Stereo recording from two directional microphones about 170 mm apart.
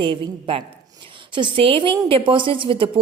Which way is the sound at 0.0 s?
30° right (ahead or behind).